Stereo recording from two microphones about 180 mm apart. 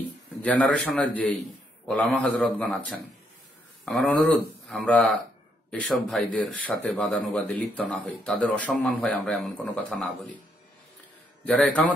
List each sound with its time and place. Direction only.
0.4 s a man's voice: 10° left (ahead or behind)
3.8 s a man's voice: centre (ahead or behind)
11.4 s a man's voice: 5° left (ahead or behind)